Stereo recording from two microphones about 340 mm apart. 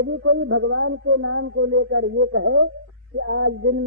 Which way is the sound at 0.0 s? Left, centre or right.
Right.